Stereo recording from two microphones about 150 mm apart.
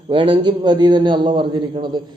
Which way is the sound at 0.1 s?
35° right (ahead or behind).